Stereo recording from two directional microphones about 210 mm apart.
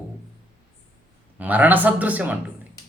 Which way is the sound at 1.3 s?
5° right (ahead or behind).